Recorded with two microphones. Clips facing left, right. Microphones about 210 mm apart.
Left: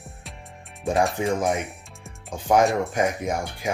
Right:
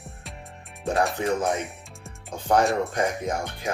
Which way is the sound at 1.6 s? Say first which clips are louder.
Right 1 dB; centre (ahead or behind).